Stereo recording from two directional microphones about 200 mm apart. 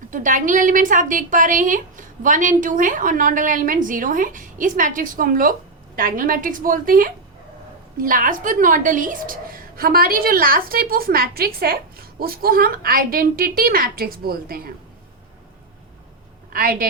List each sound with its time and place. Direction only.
0.1 s a woman's voice: 40° right (ahead or behind)
16.5 s a woman's voice: 45° right (ahead or behind)